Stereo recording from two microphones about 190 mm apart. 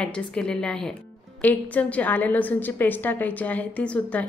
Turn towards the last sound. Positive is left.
turn(degrees=5)  # may be behind; listen again after turning